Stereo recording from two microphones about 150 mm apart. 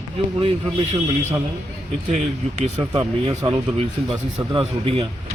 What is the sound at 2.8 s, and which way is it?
Speech, 40° right (ahead or behind).